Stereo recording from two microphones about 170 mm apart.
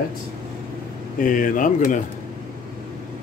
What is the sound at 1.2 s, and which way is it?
Speech, 50° left (ahead or behind).